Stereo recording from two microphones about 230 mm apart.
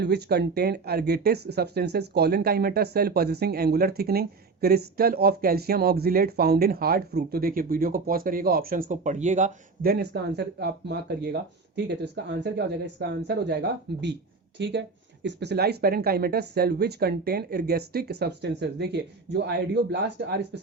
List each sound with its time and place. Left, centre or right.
0.0 s speech: right